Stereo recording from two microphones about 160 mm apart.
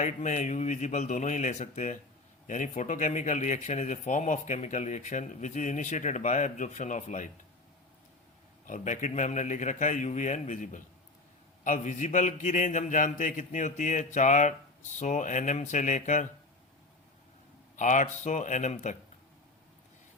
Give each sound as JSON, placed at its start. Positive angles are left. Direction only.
{"t": 0.0, "sound": "speech", "side_deg": 50}
{"t": 8.6, "sound": "speech", "side_deg": 50}
{"t": 17.7, "sound": "speech", "side_deg": 50}